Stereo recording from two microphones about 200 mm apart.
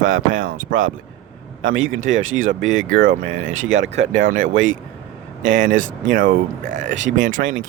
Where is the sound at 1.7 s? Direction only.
75° right (ahead or behind).